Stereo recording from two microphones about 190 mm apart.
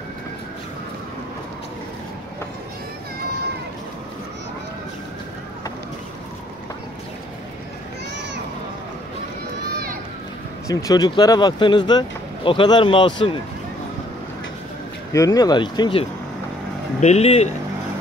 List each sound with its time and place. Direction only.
10.7 s speech: 20° left (ahead or behind)
15.1 s speech: 20° left (ahead or behind); by 17.5 s 35° left (ahead or behind)